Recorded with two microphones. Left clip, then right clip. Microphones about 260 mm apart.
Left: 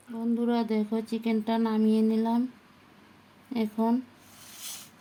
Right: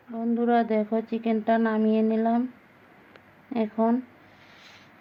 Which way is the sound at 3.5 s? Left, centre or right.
Centre.